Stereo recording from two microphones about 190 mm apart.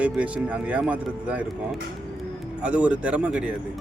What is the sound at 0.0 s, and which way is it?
Speech, 5° right (ahead or behind).